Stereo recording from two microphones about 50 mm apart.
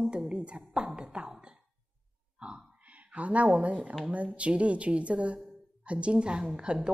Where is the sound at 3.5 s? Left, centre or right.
Right.